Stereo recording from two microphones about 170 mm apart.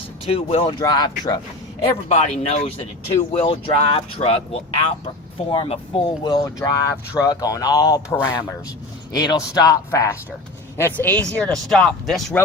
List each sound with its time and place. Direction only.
0.3 s speech: 35° left (ahead or behind)
0.7 s speech: 25° left (ahead or behind)
2.0 s speech: 40° left (ahead or behind); by 12.4 s 5° left (ahead or behind)